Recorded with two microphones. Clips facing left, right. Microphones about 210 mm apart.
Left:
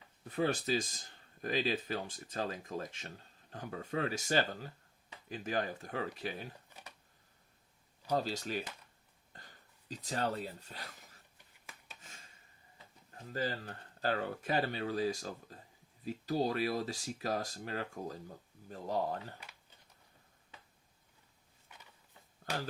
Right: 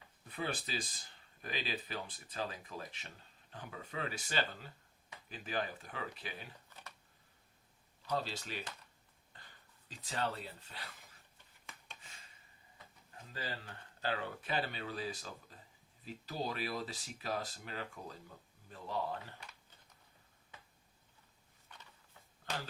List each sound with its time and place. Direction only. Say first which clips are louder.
0.3 s speech: left 8 dB; 40° left (ahead or behind)
6.7 s computer keyboard: left 1 dB; 10° left (ahead or behind)
8.1 s speech: left 5 dB; 40° left (ahead or behind)
9.3 s a sound: left 4 dB; 45° left (ahead or behind)
9.9 s speech: left 3 dB; 40° left (ahead or behind)
13.3 s speech: left 8 dB; 45° left (ahead or behind)